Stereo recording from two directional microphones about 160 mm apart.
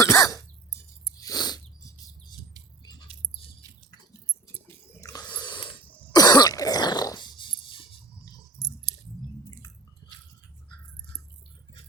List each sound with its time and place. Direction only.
0.1 s cough: 25° left (ahead or behind)
1.1 s a sound: 20° left (ahead or behind)
3.6 s dog: 20° right (ahead or behind)
4.9 s snort: 20° left (ahead or behind)
6.1 s cough: 25° left (ahead or behind)
9.5 s a sound: 25° left (ahead or behind)